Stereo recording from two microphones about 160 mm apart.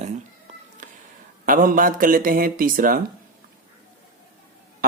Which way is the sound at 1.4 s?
60° right (ahead or behind).